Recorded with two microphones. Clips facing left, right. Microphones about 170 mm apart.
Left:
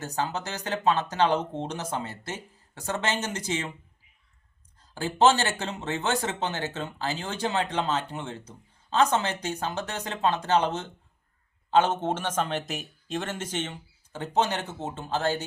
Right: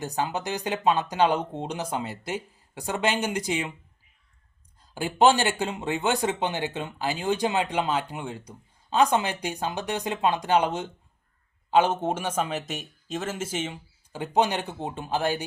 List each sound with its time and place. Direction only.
0.0 s speech: 15° right (ahead or behind)
4.9 s speech: 15° right (ahead or behind)